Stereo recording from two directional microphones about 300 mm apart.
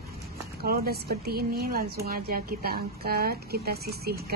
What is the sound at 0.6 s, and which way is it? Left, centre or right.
A woman's voice, right.